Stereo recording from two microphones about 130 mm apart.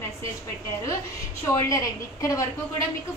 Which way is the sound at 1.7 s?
25° left (ahead or behind).